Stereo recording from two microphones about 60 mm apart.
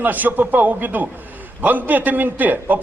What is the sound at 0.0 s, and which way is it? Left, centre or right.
A man's voice, right.